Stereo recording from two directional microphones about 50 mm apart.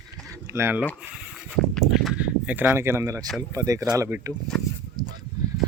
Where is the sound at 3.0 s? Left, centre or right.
Right.